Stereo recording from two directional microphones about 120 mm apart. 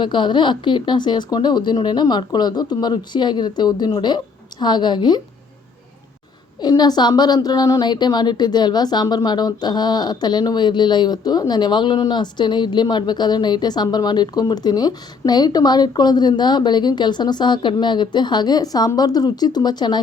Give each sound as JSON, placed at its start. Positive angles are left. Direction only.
{"t": 0.0, "sound": "a woman's voice", "side_deg": 40}
{"t": 6.6, "sound": "a woman's voice", "side_deg": 35}